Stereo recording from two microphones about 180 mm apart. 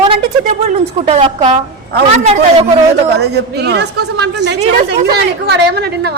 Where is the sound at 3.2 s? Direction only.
65° right (ahead or behind).